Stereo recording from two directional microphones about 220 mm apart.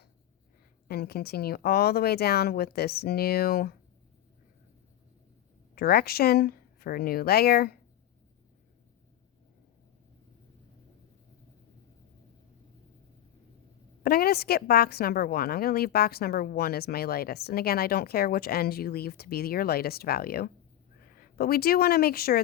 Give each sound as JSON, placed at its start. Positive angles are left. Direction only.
{"t": 0.9, "sound": "a woman's voice", "side_deg": 45}
{"t": 5.7, "sound": "a woman's voice", "side_deg": 45}
{"t": 14.0, "sound": "a woman's voice", "side_deg": 45}